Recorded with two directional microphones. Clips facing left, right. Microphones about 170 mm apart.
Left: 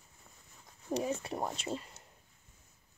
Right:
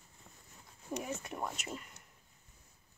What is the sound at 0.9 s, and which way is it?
Speech, 30° left (ahead or behind).